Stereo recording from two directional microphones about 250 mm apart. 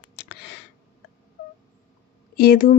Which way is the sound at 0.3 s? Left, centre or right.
Left.